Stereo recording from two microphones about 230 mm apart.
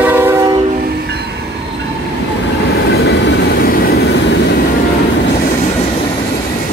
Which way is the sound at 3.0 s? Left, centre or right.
Left.